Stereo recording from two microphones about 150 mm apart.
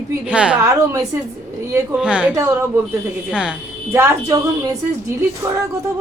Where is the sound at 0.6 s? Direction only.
20° right (ahead or behind).